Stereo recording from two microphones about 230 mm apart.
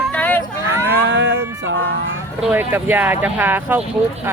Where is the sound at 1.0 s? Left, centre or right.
Right.